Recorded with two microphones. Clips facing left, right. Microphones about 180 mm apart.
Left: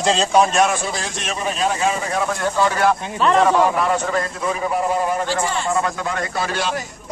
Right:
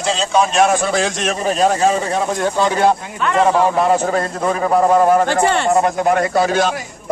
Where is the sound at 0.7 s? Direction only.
60° right (ahead or behind).